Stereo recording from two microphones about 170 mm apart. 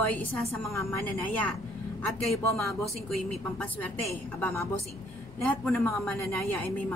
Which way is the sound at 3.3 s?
5° left (ahead or behind).